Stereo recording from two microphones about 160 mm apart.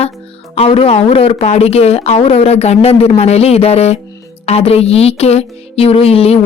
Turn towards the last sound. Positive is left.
turn(degrees=40)  # may be behind; listen again after turning